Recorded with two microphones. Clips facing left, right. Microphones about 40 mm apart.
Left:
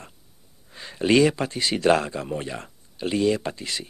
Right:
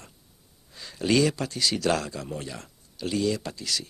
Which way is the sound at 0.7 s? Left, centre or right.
Left.